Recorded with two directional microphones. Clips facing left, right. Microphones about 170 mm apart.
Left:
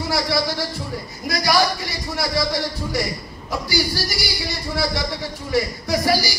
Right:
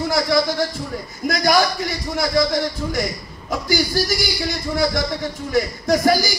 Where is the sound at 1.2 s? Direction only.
50° right (ahead or behind).